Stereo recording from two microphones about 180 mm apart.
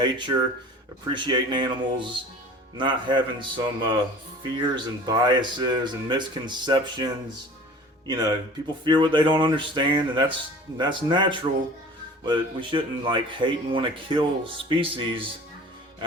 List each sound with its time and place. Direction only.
0.0 s speech: 25° right (ahead or behind)